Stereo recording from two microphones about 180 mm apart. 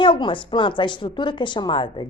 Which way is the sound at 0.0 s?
25° left (ahead or behind).